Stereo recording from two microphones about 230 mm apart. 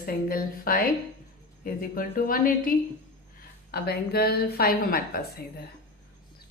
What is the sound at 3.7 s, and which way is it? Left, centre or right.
A woman's voice, left.